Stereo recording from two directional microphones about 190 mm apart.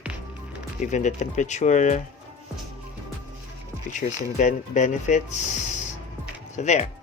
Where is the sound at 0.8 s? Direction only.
40° left (ahead or behind).